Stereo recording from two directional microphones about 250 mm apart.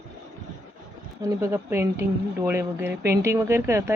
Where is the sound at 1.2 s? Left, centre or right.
Centre.